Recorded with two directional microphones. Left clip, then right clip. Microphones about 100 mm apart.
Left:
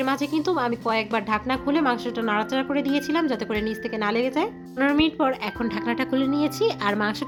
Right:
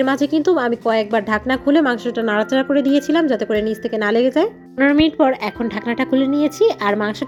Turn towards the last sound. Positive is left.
turn(degrees=-45)  # may be behind; listen again after turning